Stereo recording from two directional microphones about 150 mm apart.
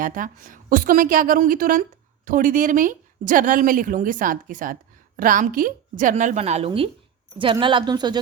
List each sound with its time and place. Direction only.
0.0 s a woman's voice: 65° right (ahead or behind); by 8.2 s 30° right (ahead or behind)